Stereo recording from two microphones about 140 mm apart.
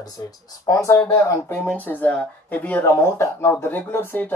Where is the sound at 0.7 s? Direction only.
20° left (ahead or behind).